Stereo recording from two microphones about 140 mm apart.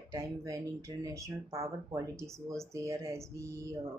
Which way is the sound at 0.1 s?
20° right (ahead or behind).